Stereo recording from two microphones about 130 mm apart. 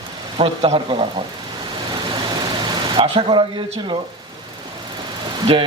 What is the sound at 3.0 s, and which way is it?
Speech, 40° right (ahead or behind).